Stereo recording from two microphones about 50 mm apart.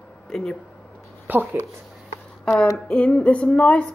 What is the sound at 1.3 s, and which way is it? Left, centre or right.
Speech, right.